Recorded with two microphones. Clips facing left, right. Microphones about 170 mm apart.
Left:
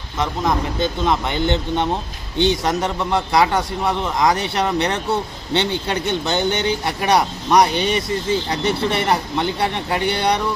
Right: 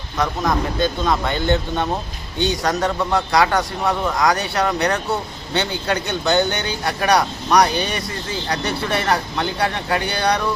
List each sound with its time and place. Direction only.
0.2 s speech: 20° left (ahead or behind)